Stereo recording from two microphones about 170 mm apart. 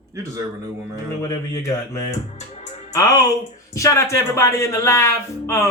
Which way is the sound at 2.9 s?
20° left (ahead or behind).